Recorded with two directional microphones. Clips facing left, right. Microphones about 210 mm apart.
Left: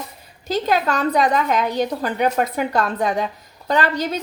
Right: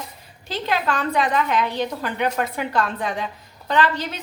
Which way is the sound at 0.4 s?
40° left (ahead or behind).